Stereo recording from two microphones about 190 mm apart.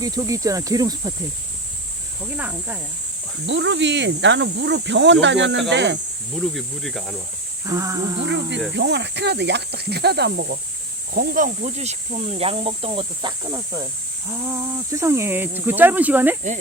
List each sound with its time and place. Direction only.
0.0 s speech: 20° right (ahead or behind)
2.3 s speech: 10° right (ahead or behind)
3.4 s speech: 70° right (ahead or behind)
6.4 s speech: centre (ahead or behind)
7.6 s speech: 15° right (ahead or behind)
8.2 s speech: 70° right (ahead or behind)
11.1 s speech: 50° right (ahead or behind); by 16.4 s 10° right (ahead or behind)